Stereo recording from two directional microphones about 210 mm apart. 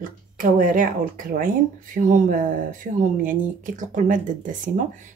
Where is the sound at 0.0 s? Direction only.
40° right (ahead or behind).